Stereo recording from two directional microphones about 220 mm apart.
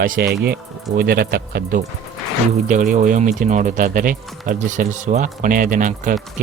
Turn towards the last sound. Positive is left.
turn(degrees=-35)  # may be behind; listen again after turning